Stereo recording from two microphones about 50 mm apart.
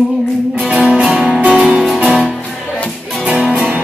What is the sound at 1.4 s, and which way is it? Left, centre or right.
Music, right.